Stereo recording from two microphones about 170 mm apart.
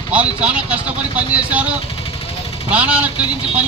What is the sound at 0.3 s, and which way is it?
A man's voice, 5° right (ahead or behind).